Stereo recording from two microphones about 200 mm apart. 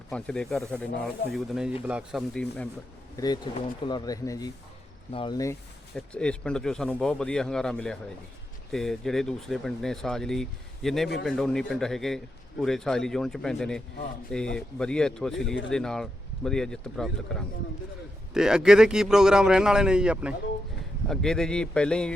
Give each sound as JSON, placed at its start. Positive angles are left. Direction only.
{"t": 0.1, "sound": "a man's voice", "side_deg": 5}
{"t": 3.2, "sound": "speech", "side_deg": 20}
{"t": 6.1, "sound": "a man's voice", "side_deg": 5}